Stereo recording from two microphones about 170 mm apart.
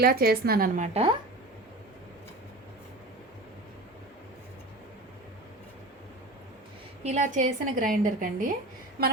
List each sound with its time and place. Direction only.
0.0 s a woman's voice: 65° right (ahead or behind)
7.0 s a woman's voice: 45° right (ahead or behind)
9.0 s a sound: 65° right (ahead or behind)